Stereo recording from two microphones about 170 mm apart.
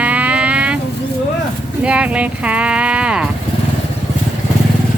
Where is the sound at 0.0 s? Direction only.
10° right (ahead or behind).